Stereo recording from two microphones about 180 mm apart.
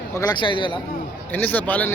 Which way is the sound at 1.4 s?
10° left (ahead or behind).